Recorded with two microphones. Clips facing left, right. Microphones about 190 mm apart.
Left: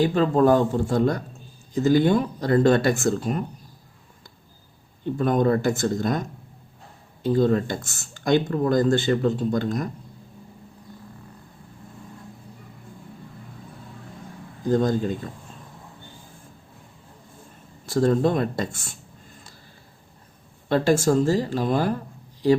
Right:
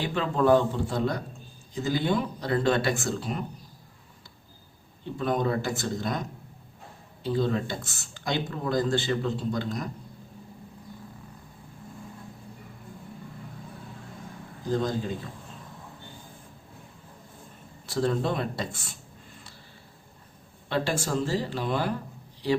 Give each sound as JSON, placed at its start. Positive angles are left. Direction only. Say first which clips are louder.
{"t": 0.0, "sound": "speech", "louder": "left 7 dB", "side_deg": 40}
{"t": 5.1, "sound": "speech", "louder": "left 6 dB", "side_deg": 50}
{"t": 14.7, "sound": "speech", "louder": "left 6 dB", "side_deg": 50}
{"t": 17.8, "sound": "speech", "louder": "left 7 dB", "side_deg": 45}
{"t": 20.7, "sound": "speech", "louder": "left 9 dB", "side_deg": 45}